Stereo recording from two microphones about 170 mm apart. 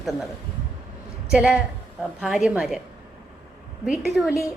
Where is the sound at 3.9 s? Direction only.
5° right (ahead or behind).